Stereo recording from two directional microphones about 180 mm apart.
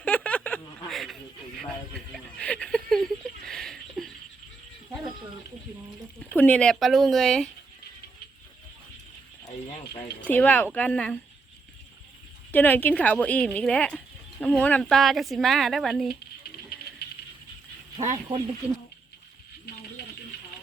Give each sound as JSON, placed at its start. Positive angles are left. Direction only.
{"t": 0.0, "sound": "a sound", "side_deg": 5}
{"t": 6.3, "sound": "speech", "side_deg": 10}
{"t": 10.2, "sound": "speech", "side_deg": 10}
{"t": 12.5, "sound": "speech", "side_deg": 10}
{"t": 18.0, "sound": "speech", "side_deg": -40}